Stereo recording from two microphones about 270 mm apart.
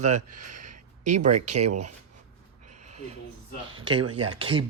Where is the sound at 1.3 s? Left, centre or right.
Right.